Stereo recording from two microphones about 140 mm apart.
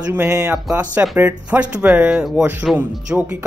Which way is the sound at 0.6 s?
5° right (ahead or behind).